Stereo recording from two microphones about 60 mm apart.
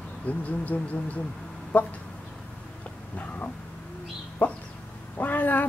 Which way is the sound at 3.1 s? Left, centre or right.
Left.